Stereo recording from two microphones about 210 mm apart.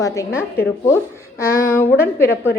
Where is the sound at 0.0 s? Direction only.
15° left (ahead or behind).